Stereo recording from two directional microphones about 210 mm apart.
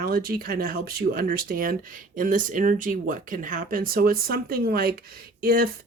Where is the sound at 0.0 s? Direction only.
45° right (ahead or behind).